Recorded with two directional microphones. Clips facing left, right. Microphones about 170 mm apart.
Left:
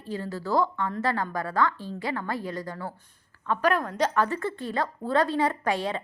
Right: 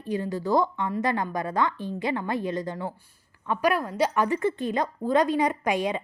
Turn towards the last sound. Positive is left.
turn(degrees=-15)  # may be behind; listen again after turning